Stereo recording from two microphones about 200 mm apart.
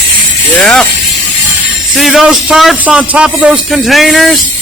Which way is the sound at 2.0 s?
Centre (ahead or behind).